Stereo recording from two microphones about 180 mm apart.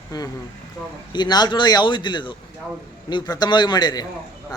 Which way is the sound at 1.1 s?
25° left (ahead or behind).